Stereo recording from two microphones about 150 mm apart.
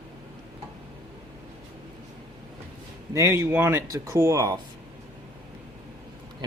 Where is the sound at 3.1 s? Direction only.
20° right (ahead or behind).